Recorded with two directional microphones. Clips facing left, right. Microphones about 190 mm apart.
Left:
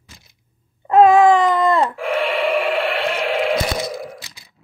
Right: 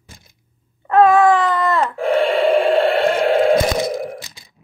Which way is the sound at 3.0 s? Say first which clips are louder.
Right 6 dB; 50° right (ahead or behind).